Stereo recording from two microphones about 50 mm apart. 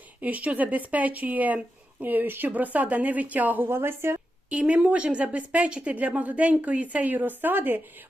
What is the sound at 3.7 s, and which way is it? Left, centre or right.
Speech, right.